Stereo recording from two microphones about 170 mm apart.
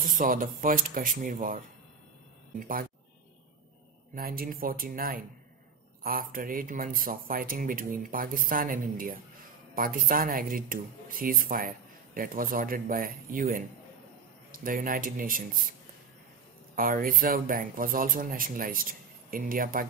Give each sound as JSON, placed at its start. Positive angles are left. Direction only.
{"t": 0.0, "sound": "speech", "side_deg": -55}
{"t": 2.6, "sound": "speech", "side_deg": -55}
{"t": 4.1, "sound": "speech", "side_deg": -60}
{"t": 16.7, "sound": "speech", "side_deg": -55}